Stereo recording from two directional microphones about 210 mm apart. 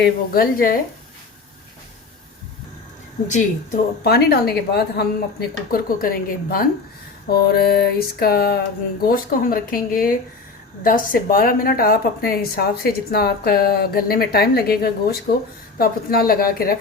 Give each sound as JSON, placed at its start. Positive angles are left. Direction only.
{"t": 0.0, "sound": "a woman's voice", "side_deg": 45}
{"t": 3.2, "sound": "a woman's voice", "side_deg": 35}